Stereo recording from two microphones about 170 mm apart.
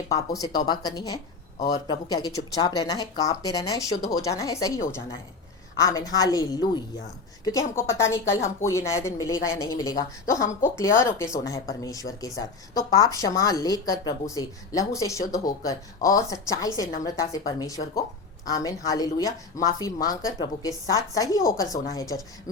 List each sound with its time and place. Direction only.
0.1 s speech: 20° left (ahead or behind)